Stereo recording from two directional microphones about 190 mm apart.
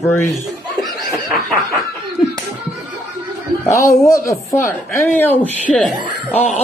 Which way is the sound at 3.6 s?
15° left (ahead or behind).